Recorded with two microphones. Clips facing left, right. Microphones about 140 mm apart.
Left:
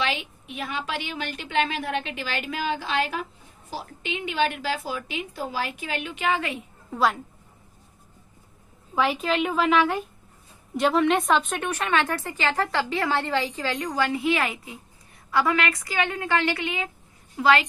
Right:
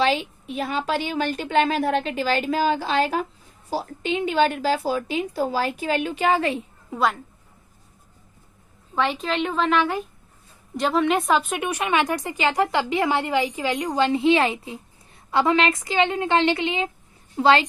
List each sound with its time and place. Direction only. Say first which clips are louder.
0.0 s a woman's voice: right 7 dB; 35° right (ahead or behind)
6.9 s a woman's voice: even; centre (ahead or behind)
8.9 s a woman's voice: even; 5° left (ahead or behind); by 17.6 s 30° right (ahead or behind)